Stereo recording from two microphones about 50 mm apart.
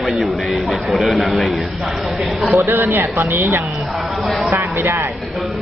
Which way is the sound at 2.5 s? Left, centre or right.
Right.